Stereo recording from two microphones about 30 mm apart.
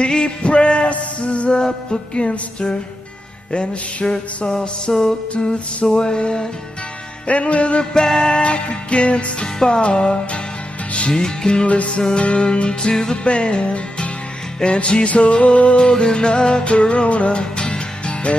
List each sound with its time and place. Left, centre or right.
0.0 s music: left
3.5 s music: left
7.2 s music: left
7.8 s music: left
11.1 s music: left
11.6 s music: left
15.0 s music: left
15.8 s music: left
17.4 s music: left